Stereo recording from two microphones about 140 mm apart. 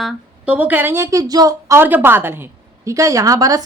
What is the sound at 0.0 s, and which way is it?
Speech, 10° right (ahead or behind).